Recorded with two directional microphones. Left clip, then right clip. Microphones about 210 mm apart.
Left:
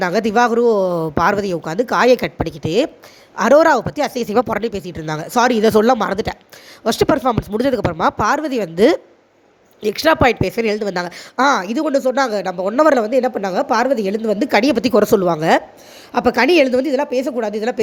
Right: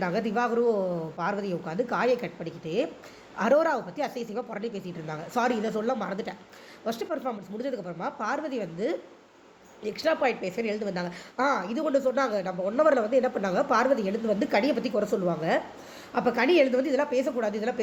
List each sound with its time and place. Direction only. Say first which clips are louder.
0.0 s a woman's voice: left 12 dB; 45° left (ahead or behind)